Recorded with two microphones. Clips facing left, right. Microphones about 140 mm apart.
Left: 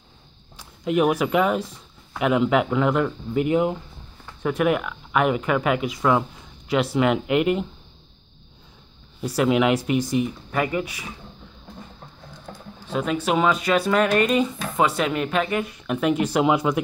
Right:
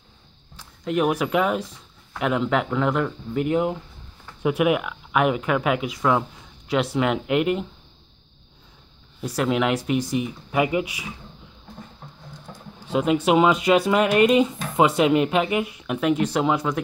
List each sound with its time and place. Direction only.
0.6 s speech: 5° left (ahead or behind)
9.2 s speech: 5° left (ahead or behind); by 11.1 s 15° right (ahead or behind)
12.9 s speech: 20° right (ahead or behind); by 16.8 s 10° left (ahead or behind)